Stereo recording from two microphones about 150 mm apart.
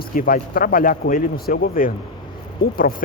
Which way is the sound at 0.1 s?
70° left (ahead or behind).